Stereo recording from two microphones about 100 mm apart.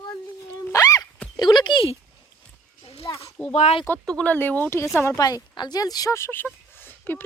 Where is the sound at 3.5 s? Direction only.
90° left.